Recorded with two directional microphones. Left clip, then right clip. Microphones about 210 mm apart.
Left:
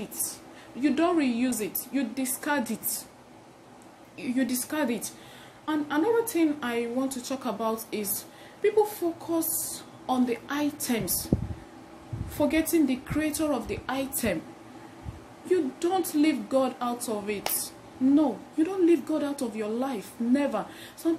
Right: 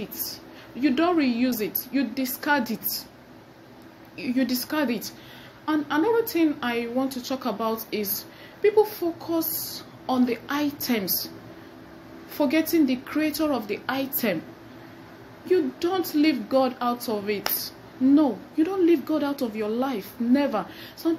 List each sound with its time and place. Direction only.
0.7 s speech: 20° left (ahead or behind)
4.2 s a woman's voice: 15° left (ahead or behind)
12.4 s speech: 15° left (ahead or behind)
15.5 s a woman's voice: 20° left (ahead or behind)